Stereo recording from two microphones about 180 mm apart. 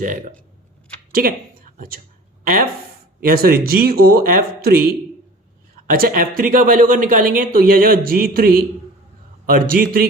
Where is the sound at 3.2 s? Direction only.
55° right (ahead or behind).